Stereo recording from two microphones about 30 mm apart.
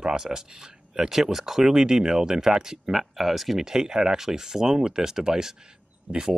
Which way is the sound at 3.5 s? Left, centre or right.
Centre.